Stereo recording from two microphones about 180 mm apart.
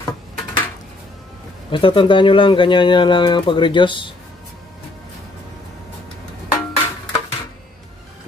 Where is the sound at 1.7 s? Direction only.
30° left (ahead or behind).